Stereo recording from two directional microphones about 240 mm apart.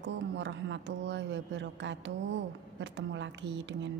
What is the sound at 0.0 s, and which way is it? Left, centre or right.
A woman's voice, right.